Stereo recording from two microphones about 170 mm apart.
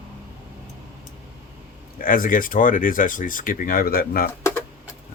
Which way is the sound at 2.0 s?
55° left (ahead or behind).